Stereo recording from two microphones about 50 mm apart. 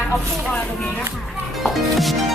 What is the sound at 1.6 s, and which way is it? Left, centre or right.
Speech, centre.